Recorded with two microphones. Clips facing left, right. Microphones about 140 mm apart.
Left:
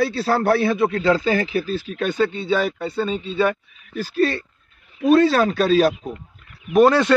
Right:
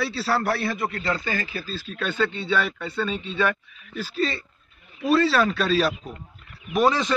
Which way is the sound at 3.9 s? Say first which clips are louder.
Left 6 dB; 55° left (ahead or behind).